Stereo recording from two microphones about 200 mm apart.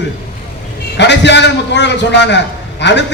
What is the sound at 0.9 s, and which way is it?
A man's voice, 60° left (ahead or behind).